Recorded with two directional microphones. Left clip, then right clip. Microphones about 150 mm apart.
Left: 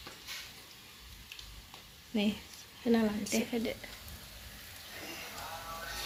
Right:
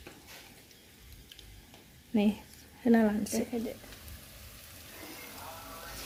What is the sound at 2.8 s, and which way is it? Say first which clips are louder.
Speech: right 4 dB; 80° right.